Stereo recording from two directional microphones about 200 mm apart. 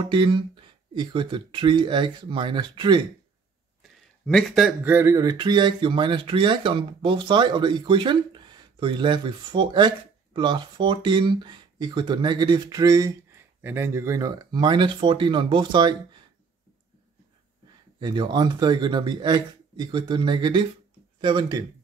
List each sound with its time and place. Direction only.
0.0 s speech: 25° right (ahead or behind)
3.8 s a sound: centre (ahead or behind)
4.9 s speech: 15° right (ahead or behind)
17.9 s speech: 20° right (ahead or behind)